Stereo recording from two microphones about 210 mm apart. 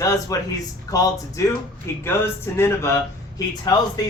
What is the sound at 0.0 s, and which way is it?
A man's voice, 15° left (ahead or behind).